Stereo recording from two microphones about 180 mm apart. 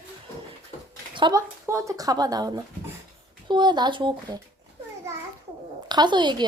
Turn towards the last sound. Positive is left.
turn(degrees=-25)  # may be behind; listen again after turning